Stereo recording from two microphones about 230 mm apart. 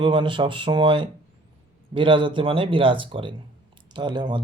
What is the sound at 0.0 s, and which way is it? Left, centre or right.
Speech, right.